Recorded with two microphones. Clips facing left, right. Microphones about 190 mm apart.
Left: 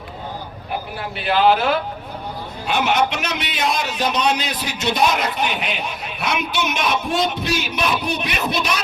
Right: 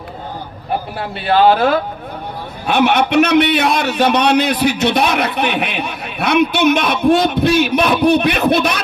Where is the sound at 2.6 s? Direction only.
60° right (ahead or behind).